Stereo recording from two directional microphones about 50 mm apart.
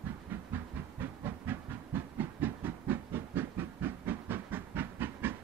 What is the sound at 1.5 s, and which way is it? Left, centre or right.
Train, right.